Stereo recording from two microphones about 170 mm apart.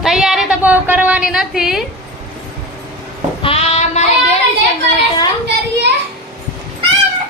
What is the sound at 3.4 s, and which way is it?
Child singing, 35° left (ahead or behind).